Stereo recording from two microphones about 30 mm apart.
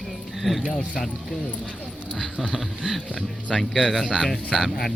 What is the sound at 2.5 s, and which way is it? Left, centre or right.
Speech, centre.